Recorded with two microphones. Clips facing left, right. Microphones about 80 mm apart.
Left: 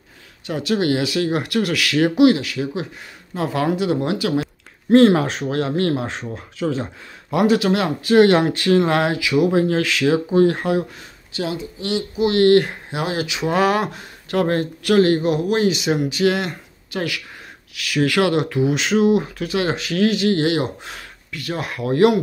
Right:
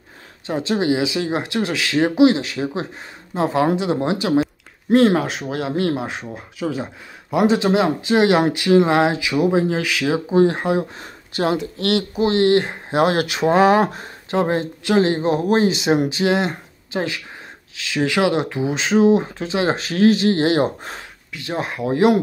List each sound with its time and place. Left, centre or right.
0.5 s speech: right
4.9 s speech: centre; by 10.9 s right
11.0 s speech: right
11.5 s speech: right
12.2 s speech: right
12.9 s speech: right
13.5 s speech: right
14.3 s speech: right
21.3 s speech: right